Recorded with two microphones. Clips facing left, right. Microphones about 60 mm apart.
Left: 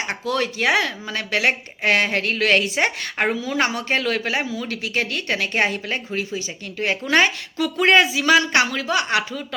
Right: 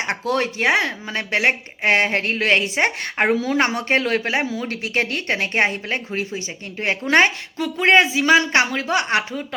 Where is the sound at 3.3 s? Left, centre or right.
Right.